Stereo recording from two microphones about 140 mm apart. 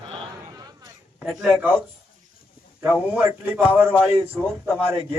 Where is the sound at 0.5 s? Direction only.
30° right (ahead or behind).